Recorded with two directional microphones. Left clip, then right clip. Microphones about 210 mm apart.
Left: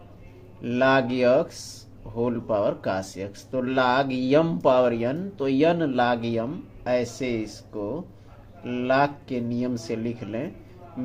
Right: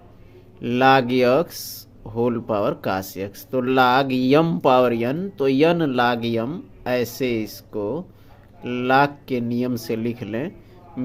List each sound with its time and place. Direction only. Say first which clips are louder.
0.6 s speech: right 5 dB; 45° right (ahead or behind)